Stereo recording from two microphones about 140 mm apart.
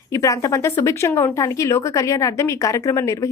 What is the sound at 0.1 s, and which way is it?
Speech, 20° left (ahead or behind).